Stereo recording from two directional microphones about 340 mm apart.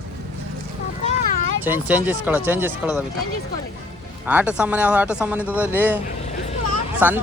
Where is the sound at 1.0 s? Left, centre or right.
Centre.